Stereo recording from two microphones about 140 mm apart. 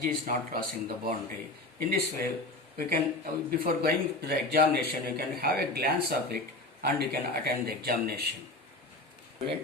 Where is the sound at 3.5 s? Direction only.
90° right.